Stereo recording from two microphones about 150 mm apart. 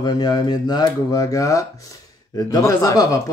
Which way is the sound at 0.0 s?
25° left (ahead or behind).